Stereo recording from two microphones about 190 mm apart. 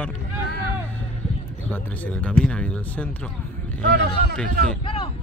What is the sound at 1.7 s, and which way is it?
Speech, 10° left (ahead or behind).